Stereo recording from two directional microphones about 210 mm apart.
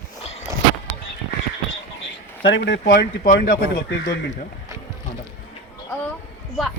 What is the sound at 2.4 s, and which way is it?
Speech, 55° left (ahead or behind).